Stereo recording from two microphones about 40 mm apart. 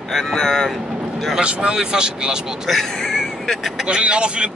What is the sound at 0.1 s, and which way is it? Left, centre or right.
Speech, centre.